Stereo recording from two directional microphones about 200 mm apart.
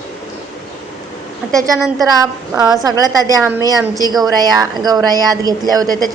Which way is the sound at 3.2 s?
20° right (ahead or behind).